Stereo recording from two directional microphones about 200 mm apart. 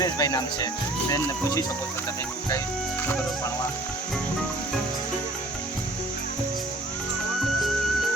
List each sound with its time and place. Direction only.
0.0 s speech: 15° left (ahead or behind)